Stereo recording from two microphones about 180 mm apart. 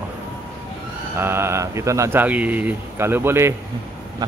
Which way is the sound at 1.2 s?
15° right (ahead or behind).